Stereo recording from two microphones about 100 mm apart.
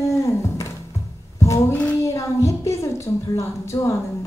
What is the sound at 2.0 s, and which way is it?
A woman's voice, 30° left (ahead or behind).